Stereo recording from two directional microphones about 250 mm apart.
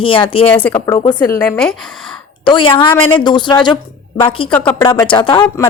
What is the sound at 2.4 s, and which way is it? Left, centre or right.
A woman's voice, centre.